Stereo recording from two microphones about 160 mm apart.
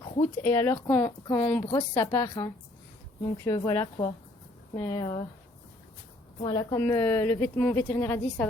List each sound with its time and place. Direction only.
0.4 s a woman's voice: 15° left (ahead or behind)
1.6 s speech: 30° left (ahead or behind)
6.4 s speech: 25° left (ahead or behind)
6.7 s a woman's voice: 15° left (ahead or behind)